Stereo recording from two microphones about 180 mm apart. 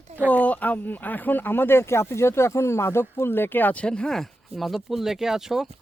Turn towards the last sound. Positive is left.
turn(degrees=0)  # may be behind; listen again after turning